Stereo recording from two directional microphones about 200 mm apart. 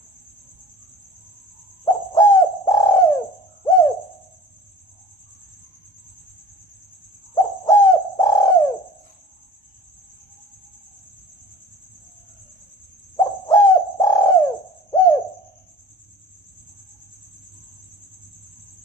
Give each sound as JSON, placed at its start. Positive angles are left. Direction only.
{"t": 1.8, "sound": "bird", "side_deg": 15}
{"t": 7.3, "sound": "bird", "side_deg": 15}
{"t": 13.1, "sound": "bird", "side_deg": 15}